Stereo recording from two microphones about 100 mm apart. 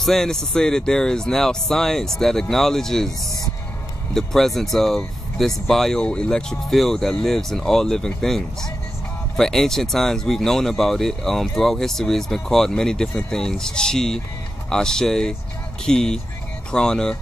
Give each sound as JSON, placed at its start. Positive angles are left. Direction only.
{"t": 0.0, "sound": "speech", "side_deg": 5}
{"t": 4.1, "sound": "speech", "side_deg": 5}